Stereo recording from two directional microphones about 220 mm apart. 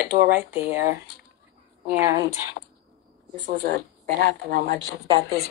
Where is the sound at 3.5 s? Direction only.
40° right (ahead or behind).